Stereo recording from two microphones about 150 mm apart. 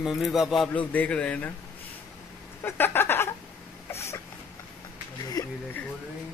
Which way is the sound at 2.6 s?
15° left (ahead or behind).